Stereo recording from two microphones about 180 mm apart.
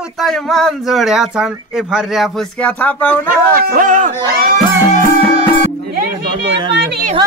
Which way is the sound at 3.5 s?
50° right (ahead or behind).